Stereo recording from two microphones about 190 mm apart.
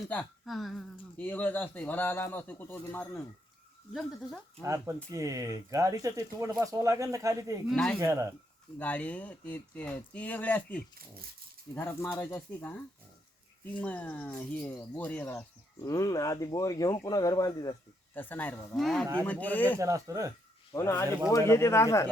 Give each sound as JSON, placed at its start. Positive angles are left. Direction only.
{"t": 0.1, "sound": "speech", "side_deg": 5}
{"t": 3.9, "sound": "speech", "side_deg": 0}
{"t": 4.6, "sound": "speech", "side_deg": -15}
{"t": 7.7, "sound": "speech", "side_deg": 0}
{"t": 7.9, "sound": "speech", "side_deg": -15}
{"t": 8.8, "sound": "speech", "side_deg": 10}
{"t": 18.1, "sound": "speech", "side_deg": 10}
{"t": 18.8, "sound": "speech", "side_deg": 0}
{"t": 19.8, "sound": "speech", "side_deg": -15}
{"t": 20.7, "sound": "speech", "side_deg": 15}